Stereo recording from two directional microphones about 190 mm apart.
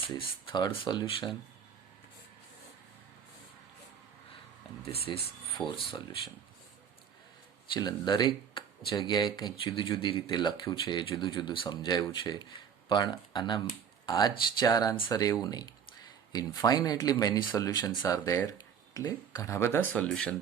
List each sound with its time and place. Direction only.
0.2 s speech: 25° left (ahead or behind)
5.0 s speech: 30° left (ahead or behind)
7.7 s speech: 20° left (ahead or behind); by 20.3 s 5° left (ahead or behind)